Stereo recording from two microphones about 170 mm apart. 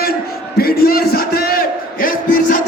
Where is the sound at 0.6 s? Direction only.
60° left (ahead or behind).